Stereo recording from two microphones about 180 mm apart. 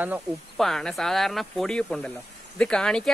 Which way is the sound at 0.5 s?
Centre (ahead or behind).